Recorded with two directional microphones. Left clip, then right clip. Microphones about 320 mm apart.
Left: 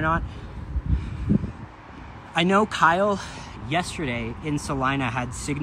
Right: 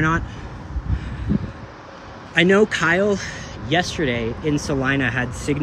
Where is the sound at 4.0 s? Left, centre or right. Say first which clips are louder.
Right 7 dB; centre.